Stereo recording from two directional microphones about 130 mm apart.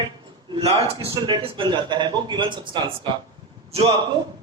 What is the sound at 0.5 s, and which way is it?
Speech, 55° right (ahead or behind).